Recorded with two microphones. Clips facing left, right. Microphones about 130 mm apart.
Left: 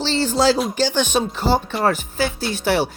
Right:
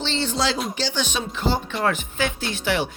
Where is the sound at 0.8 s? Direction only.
45° left (ahead or behind).